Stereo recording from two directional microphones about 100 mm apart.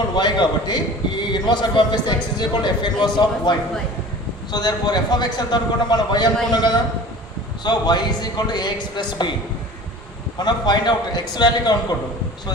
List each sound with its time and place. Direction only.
0.2 s a man's voice: 45° left (ahead or behind)
4.5 s a man's voice: 45° left (ahead or behind)
10.3 s a man's voice: 45° left (ahead or behind)